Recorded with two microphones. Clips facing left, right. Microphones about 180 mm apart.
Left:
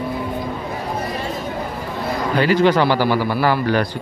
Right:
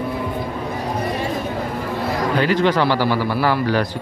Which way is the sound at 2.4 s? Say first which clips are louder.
Left 3 dB; centre (ahead or behind).